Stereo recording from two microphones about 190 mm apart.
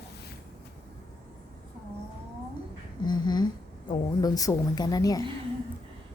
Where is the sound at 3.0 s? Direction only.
20° left (ahead or behind).